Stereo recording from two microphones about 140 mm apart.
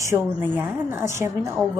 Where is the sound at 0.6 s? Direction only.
20° right (ahead or behind).